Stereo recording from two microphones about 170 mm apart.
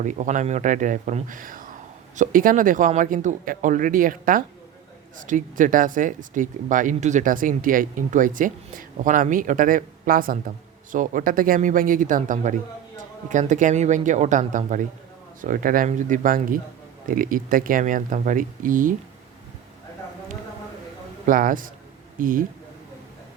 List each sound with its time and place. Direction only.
0.0 s speech: 45° right (ahead or behind)
21.2 s speech: 55° right (ahead or behind)